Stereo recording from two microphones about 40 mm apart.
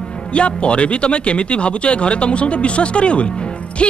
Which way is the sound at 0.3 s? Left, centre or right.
Left.